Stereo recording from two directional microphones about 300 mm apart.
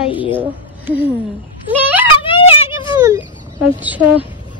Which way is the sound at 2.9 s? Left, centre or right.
Centre.